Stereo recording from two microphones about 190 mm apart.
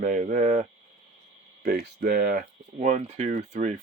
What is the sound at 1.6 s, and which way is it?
Speech, 55° right (ahead or behind).